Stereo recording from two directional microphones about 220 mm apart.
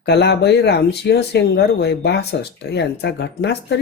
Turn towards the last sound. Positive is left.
turn(degrees=50)  # may be behind; listen again after turning